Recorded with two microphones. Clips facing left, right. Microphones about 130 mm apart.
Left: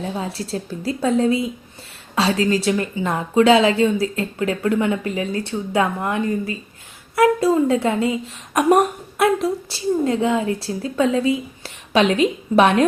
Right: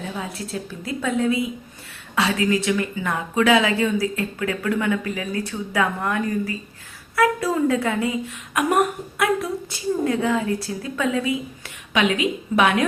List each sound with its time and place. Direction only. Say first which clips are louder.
0.0 s a woman's voice: left 4 dB; 30° left (ahead or behind)